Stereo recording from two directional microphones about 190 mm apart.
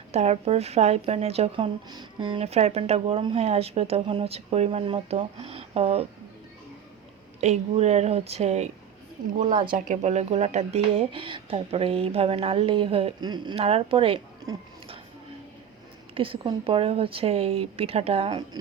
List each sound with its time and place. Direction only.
0.1 s speech: 35° right (ahead or behind)
7.4 s speech: 35° right (ahead or behind)
9.7 s speech: 40° right (ahead or behind)
16.1 s speech: 30° right (ahead or behind)